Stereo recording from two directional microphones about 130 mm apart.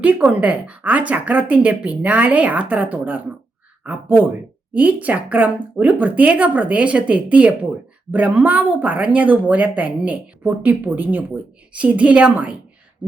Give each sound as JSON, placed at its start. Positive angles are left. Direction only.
{"t": 0.0, "sound": "speech", "side_deg": -10}